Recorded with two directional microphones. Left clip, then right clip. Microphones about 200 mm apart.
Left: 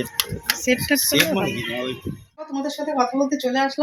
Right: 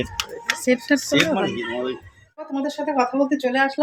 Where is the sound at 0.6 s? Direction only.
15° right (ahead or behind).